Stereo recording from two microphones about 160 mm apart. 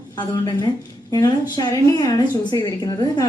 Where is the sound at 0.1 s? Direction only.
30° left (ahead or behind).